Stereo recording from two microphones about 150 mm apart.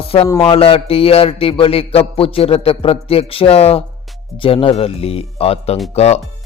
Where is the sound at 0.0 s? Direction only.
40° left (ahead or behind).